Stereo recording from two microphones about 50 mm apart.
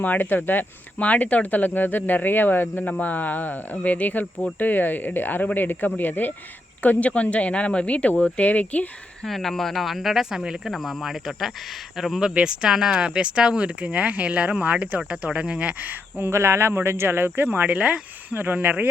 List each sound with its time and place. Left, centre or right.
0.0 s speech: left
0.9 s speech: left
6.8 s speech: left
9.2 s speech: centre
10.7 s speech: centre
12.3 s speech: centre
15.9 s speech: right
16.3 s speech: right
17.7 s speech: right